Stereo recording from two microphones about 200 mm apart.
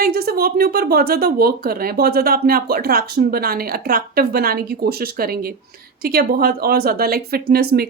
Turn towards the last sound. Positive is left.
turn(degrees=-50)  # may be behind; listen again after turning